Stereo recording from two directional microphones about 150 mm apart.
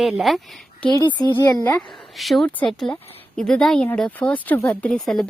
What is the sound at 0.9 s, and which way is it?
Speech, 25° left (ahead or behind).